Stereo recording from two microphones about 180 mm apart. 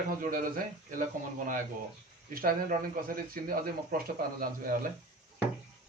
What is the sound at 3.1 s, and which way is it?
Speech, 55° right (ahead or behind).